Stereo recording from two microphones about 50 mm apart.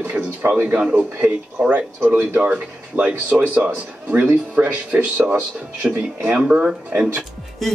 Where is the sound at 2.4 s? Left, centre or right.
Right.